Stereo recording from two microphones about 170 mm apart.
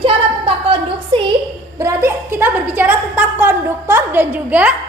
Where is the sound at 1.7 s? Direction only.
15° right (ahead or behind).